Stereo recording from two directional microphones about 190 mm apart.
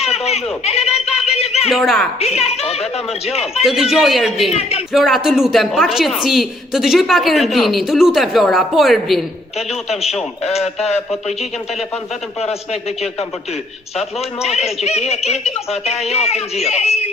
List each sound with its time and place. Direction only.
0.0 s a sound: 35° left (ahead or behind)
1.7 s a woman's voice: centre (ahead or behind)
2.1 s speech: 35° left (ahead or behind)
3.6 s a woman's voice: centre (ahead or behind)
9.6 s speech: 35° left (ahead or behind)
14.4 s speech: 35° left (ahead or behind)